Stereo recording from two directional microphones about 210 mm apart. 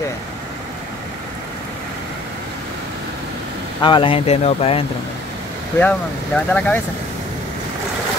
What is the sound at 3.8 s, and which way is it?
Speech, 20° left (ahead or behind).